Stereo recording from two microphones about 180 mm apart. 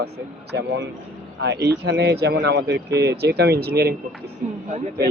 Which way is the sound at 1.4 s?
70° right (ahead or behind).